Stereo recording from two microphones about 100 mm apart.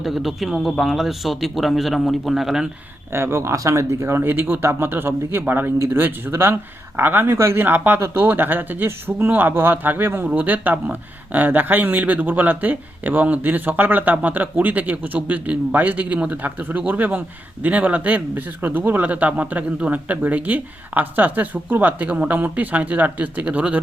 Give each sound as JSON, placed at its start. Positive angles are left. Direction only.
{"t": 0.0, "sound": "a man's voice", "side_deg": 0}
{"t": 3.1, "sound": "speech", "side_deg": -25}